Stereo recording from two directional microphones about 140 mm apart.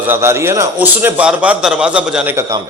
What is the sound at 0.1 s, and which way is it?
A man's voice, 20° right (ahead or behind).